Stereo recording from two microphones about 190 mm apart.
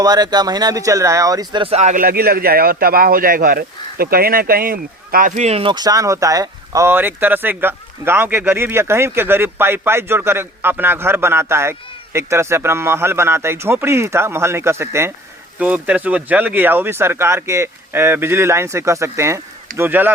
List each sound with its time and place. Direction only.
0.0 s speech: 20° right (ahead or behind)